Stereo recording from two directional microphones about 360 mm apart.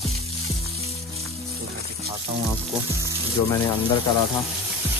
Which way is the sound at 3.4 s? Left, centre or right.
Left.